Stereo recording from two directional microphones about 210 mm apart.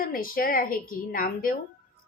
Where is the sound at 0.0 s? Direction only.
40° left (ahead or behind).